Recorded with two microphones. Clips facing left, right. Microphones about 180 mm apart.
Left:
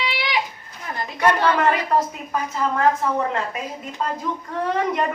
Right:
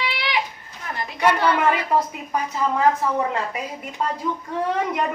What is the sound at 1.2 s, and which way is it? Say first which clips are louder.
Speech: even; 10° right (ahead or behind).